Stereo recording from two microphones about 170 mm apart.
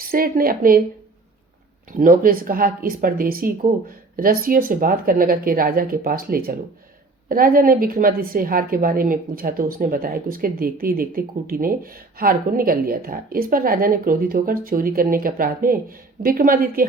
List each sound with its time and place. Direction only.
0.0 s a woman's voice: 60° right (ahead or behind)
1.9 s a woman's voice: 55° right (ahead or behind)